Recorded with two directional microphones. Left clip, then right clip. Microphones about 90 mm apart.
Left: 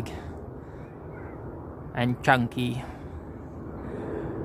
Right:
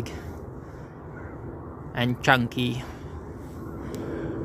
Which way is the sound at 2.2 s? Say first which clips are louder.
Right 1 dB; 15° left (ahead or behind).